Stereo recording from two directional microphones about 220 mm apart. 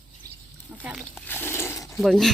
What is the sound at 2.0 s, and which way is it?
Speech, centre (ahead or behind).